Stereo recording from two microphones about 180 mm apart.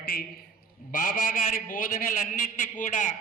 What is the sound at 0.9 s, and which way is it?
A man's voice, 50° left (ahead or behind).